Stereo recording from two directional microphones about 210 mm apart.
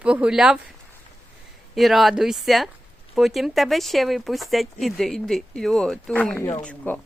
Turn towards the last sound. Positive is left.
turn(degrees=10)  # may be behind; listen again after turning